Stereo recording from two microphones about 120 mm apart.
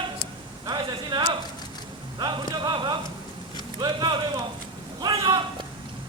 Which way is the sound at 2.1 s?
35° right (ahead or behind).